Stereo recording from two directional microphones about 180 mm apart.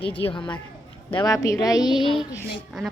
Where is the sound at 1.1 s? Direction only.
20° left (ahead or behind).